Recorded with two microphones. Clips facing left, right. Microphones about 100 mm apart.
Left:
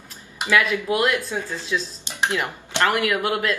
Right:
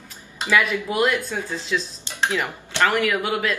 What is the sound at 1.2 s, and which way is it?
Speech, 10° left (ahead or behind).